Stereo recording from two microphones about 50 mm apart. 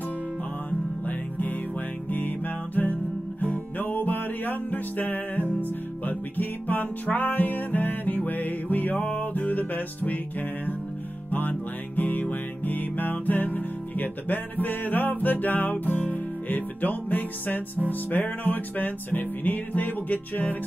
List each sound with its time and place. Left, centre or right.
0.7 s music: left
12.0 s music: left